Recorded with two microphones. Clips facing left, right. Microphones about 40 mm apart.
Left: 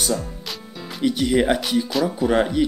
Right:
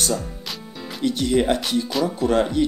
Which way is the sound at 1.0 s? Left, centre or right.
Centre.